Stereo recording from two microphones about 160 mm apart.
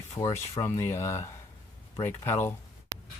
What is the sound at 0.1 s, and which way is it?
Speech, 20° left (ahead or behind).